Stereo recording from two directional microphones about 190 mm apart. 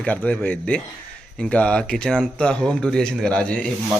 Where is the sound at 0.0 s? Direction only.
5° left (ahead or behind).